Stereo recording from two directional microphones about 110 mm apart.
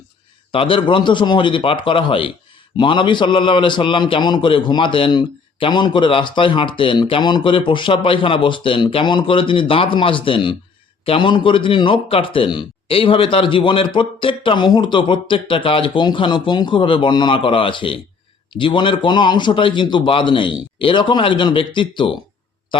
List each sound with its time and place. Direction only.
0.5 s a man's voice: 55° left (ahead or behind)